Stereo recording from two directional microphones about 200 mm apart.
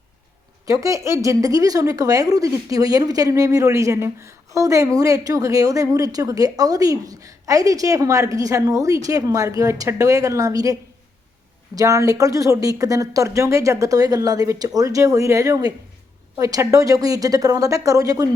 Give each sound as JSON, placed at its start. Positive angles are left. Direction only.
{"t": 0.6, "sound": "a woman's voice", "side_deg": -15}